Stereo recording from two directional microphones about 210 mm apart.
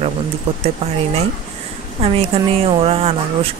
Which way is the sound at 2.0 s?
30° right (ahead or behind).